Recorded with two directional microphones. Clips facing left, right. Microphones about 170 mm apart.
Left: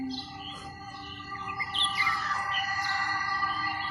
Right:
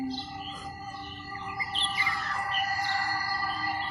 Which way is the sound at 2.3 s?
30° right (ahead or behind).